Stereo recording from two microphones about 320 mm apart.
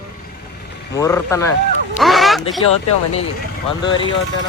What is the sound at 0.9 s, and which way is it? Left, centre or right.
Speech, centre.